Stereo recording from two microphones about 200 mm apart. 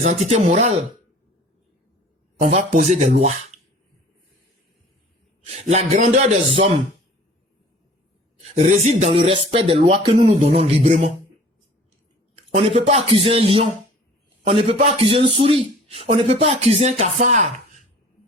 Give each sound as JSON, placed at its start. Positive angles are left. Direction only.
{"t": 0.0, "sound": "speech", "side_deg": -35}
{"t": 2.4, "sound": "speech", "side_deg": -35}
{"t": 5.5, "sound": "speech", "side_deg": -35}
{"t": 8.5, "sound": "speech", "side_deg": -35}
{"t": 12.9, "sound": "speech", "side_deg": -30}